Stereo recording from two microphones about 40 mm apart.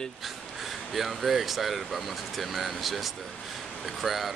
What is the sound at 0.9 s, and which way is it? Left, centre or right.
Speech, centre.